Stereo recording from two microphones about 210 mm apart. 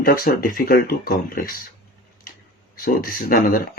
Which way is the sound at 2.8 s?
40° left (ahead or behind).